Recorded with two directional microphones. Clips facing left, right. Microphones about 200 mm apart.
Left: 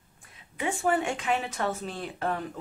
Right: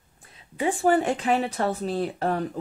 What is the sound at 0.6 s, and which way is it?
Speech, 35° right (ahead or behind).